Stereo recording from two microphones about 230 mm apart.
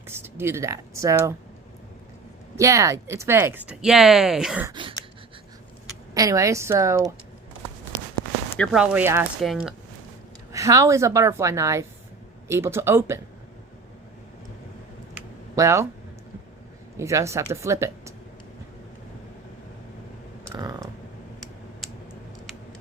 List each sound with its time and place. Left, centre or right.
0.1 s speech: centre
2.6 s speech: centre
4.7 s a sound: right
6.1 s speech: centre
8.1 s walk: centre
9.4 s speech: centre
10.5 s speech: centre
15.1 s a sound: centre
17.0 s speech: centre
20.5 s typing: centre